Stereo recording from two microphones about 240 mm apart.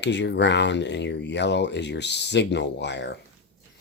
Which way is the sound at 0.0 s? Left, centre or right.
Left.